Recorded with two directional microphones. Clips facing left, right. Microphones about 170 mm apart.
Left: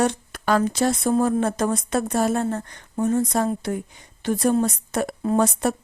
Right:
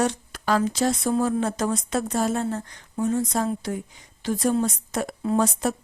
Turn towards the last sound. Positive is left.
turn(degrees=60)  # may be behind; listen again after turning